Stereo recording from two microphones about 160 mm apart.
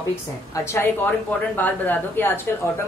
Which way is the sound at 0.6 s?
15° left (ahead or behind).